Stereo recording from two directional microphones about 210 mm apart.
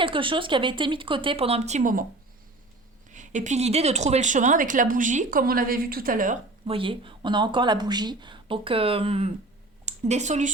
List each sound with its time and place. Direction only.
0.0 s speech: 25° right (ahead or behind); by 2.0 s 40° right (ahead or behind)
3.1 s speech: 35° right (ahead or behind)
6.7 s speech: 25° right (ahead or behind)